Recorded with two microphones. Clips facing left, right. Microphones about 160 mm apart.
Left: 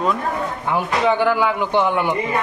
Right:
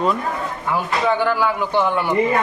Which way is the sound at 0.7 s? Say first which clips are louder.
Left 1 dB; 15° left (ahead or behind).